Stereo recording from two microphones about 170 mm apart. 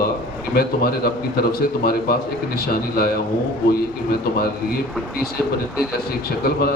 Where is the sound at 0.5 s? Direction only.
60° left (ahead or behind).